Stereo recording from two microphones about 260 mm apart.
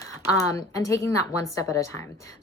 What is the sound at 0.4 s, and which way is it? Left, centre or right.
Speech, centre.